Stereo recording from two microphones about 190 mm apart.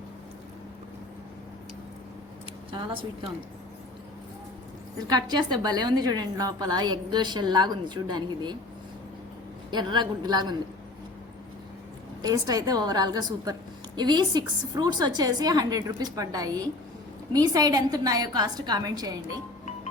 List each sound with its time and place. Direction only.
2.7 s a woman's voice: 25° right (ahead or behind)
5.0 s a woman's voice: 20° right (ahead or behind)
9.6 s a woman's voice: 25° right (ahead or behind)
12.2 s a woman's voice: 20° right (ahead or behind)